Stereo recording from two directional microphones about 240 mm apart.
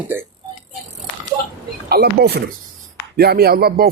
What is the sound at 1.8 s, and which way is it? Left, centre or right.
Speech, right.